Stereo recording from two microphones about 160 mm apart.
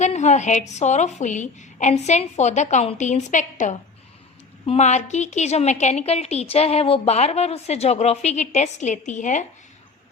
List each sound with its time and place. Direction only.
0.0 s a woman's voice: 45° left (ahead or behind)